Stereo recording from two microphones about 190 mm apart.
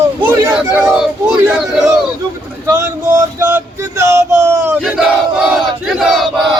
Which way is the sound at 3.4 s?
15° right (ahead or behind).